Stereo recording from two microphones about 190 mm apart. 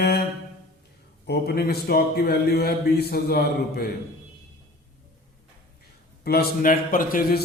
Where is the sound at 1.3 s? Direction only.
55° left (ahead or behind).